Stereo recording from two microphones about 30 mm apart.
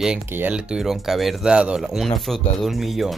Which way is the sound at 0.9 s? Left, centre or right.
Centre.